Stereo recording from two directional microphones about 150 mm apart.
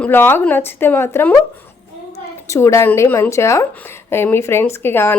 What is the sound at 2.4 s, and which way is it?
A woman's voice, 20° left (ahead or behind).